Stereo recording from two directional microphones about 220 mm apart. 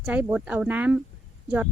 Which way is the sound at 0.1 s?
5° right (ahead or behind).